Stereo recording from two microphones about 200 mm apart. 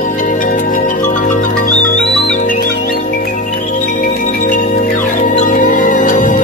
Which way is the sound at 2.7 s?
50° left (ahead or behind).